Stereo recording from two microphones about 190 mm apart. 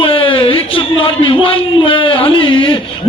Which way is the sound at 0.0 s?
30° left (ahead or behind).